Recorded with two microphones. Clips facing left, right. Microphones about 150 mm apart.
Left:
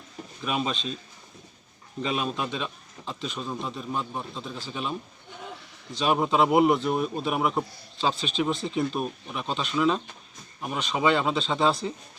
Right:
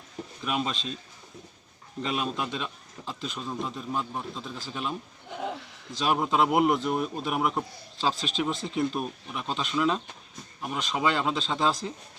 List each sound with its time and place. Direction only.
0.4 s speech: centre (ahead or behind)
2.0 s speech: centre (ahead or behind)
6.0 s speech: centre (ahead or behind)